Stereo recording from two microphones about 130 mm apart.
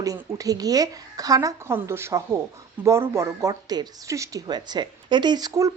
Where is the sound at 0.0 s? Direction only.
25° right (ahead or behind).